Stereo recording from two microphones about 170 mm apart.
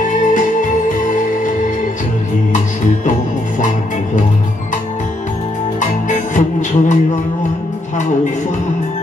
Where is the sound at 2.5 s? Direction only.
45° left (ahead or behind).